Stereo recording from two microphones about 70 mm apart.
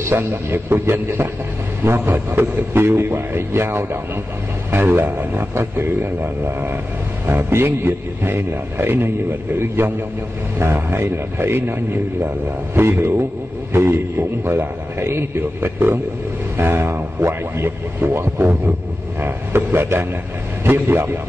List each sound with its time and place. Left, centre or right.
0.0 s a man's voice: right